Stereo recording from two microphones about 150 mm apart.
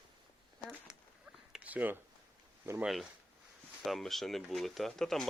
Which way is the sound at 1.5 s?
10° right (ahead or behind).